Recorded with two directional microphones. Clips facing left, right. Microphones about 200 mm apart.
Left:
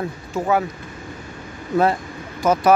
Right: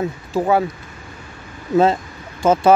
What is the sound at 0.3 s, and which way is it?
Speech, 30° right (ahead or behind).